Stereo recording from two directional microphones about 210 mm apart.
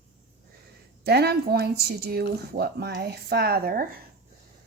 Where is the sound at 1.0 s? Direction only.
50° right (ahead or behind).